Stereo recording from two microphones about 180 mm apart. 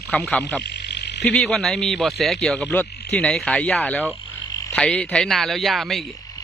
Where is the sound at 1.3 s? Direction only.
5° left (ahead or behind).